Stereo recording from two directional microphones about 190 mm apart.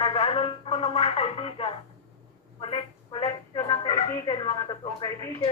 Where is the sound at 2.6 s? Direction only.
25° left (ahead or behind).